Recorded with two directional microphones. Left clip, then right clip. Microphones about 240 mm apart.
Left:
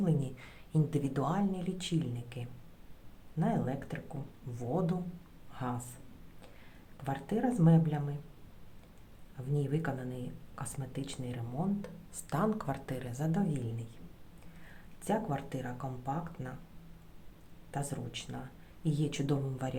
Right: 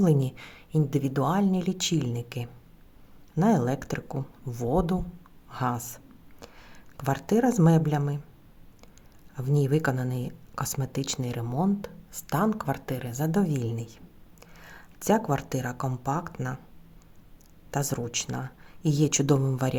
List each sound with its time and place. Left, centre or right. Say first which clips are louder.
0.0 s speech: right 10 dB; right
6.4 s a sound: right 10 dB; right
6.9 s speech: right 10 dB; right
9.6 s speech: right 10 dB; right
17.7 s speech: right 10 dB; right